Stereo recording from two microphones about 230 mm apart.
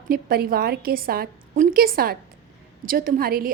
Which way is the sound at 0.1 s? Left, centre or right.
Right.